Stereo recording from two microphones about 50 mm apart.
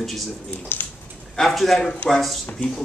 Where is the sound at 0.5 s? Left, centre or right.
Left.